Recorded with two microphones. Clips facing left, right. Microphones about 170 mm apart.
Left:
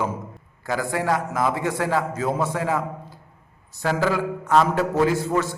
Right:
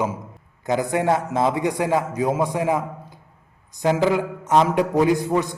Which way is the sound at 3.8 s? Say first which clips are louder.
Right 3 dB; 20° right (ahead or behind).